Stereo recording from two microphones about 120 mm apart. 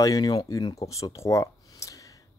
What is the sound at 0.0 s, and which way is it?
Speech, 30° left (ahead or behind).